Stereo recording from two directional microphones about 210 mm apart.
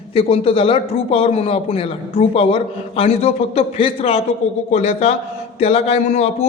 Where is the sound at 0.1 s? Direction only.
25° left (ahead or behind).